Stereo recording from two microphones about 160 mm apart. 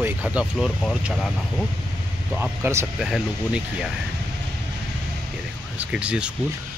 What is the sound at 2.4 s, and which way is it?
Speech, 15° right (ahead or behind).